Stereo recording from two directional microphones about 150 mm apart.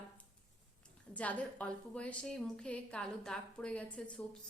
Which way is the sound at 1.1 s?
10° left (ahead or behind).